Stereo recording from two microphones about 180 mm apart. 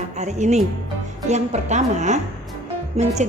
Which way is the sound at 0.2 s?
40° right (ahead or behind).